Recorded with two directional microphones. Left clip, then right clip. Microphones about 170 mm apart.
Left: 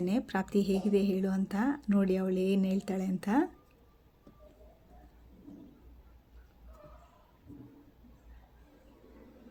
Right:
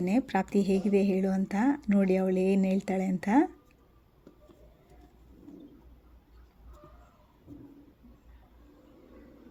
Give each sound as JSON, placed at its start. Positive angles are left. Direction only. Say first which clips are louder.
{"t": 0.0, "sound": "speech", "louder": "right 4 dB", "side_deg": -15}